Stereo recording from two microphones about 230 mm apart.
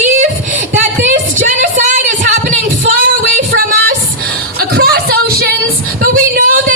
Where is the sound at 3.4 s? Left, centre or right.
Right.